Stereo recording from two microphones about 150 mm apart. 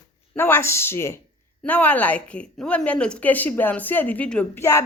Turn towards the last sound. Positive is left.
turn(degrees=20)  # may be behind; listen again after turning